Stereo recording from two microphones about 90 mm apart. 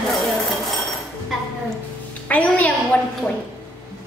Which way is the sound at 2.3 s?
15° left (ahead or behind).